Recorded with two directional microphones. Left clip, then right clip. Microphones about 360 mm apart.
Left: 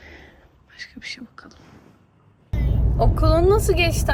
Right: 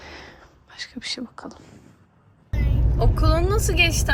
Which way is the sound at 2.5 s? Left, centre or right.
Centre.